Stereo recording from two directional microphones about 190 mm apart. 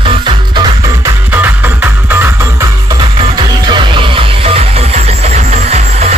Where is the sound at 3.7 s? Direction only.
25° right (ahead or behind).